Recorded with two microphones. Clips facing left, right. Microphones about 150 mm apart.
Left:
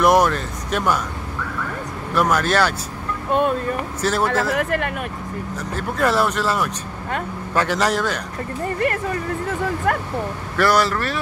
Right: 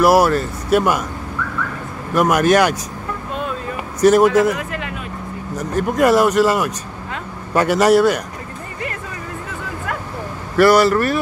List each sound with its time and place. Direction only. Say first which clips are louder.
0.0 s speech: right 3 dB; 5° right (ahead or behind)
2.1 s speech: right 5 dB; 15° right (ahead or behind)
4.0 s speech: right 10 dB; 15° right (ahead or behind)
4.6 s speech: left 5 dB; 55° left (ahead or behind)
5.6 s speech: right 6 dB; 15° right (ahead or behind)
9.9 s a sound: left 5 dB; 50° left (ahead or behind)
10.6 s speech: right 6 dB; 10° right (ahead or behind)